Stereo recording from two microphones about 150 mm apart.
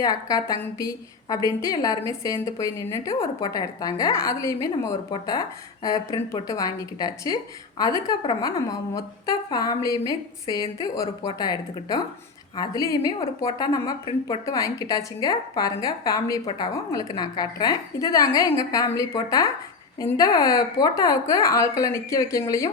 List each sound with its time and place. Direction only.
0.0 s a woman's voice: 25° left (ahead or behind)